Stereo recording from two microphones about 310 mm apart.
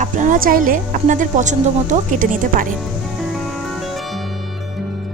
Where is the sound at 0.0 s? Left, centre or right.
Right.